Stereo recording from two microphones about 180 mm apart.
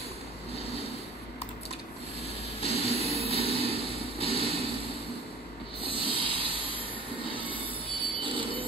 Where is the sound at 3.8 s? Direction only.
35° left (ahead or behind).